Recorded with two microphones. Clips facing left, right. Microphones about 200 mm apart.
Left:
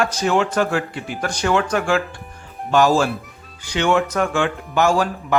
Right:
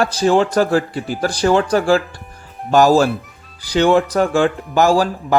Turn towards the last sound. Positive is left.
turn(degrees=-35)  # may be behind; listen again after turning